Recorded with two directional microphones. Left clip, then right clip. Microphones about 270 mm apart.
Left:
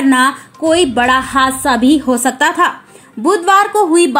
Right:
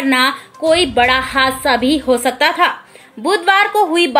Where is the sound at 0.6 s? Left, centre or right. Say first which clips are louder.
Even; left.